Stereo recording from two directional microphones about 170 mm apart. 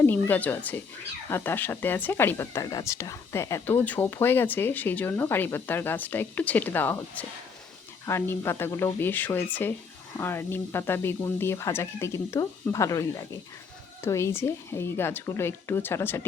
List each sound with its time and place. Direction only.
0.0 s speech: 10° left (ahead or behind)